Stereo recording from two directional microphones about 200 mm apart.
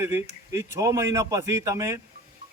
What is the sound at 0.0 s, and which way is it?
A man's voice, 15° right (ahead or behind).